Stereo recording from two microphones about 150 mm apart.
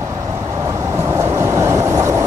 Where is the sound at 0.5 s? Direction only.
20° right (ahead or behind).